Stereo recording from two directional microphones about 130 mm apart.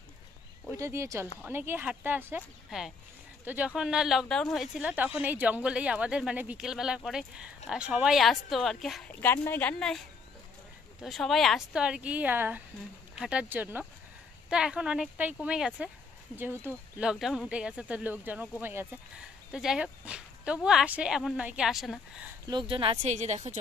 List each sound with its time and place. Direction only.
0.7 s speech: 20° right (ahead or behind)
2.7 s speech: 5° right (ahead or behind)
4.8 s speech: 10° right (ahead or behind)
9.2 s speech: 15° left (ahead or behind); by 17.1 s 15° right (ahead or behind)
17.1 s speech: centre (ahead or behind)
22.5 s speech: 40° right (ahead or behind)
23.0 s a woman's voice: 60° right (ahead or behind)